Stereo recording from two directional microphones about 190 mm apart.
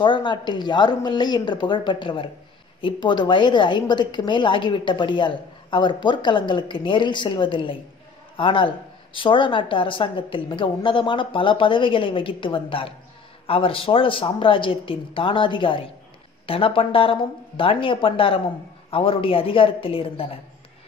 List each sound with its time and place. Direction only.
0.0 s a woman's voice: 25° left (ahead or behind)